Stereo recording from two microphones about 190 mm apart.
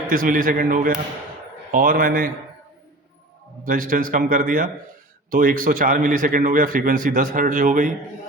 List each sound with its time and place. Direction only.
0.1 s speech: 45° right (ahead or behind)
3.7 s speech: 45° right (ahead or behind)